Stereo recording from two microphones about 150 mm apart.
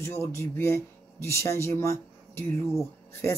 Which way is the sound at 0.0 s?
20° left (ahead or behind).